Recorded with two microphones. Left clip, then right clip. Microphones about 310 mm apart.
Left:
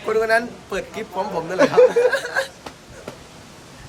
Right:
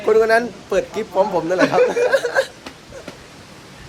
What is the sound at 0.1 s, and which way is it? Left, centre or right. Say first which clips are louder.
A man's voice: right 4 dB; centre.